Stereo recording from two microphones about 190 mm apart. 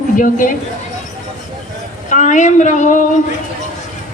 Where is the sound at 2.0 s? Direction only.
40° left (ahead or behind).